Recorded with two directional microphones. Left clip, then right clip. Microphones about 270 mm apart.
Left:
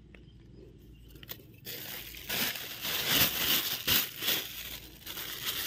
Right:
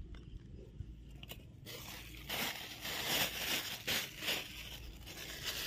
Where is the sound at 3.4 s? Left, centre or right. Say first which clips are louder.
Left 8 dB; left.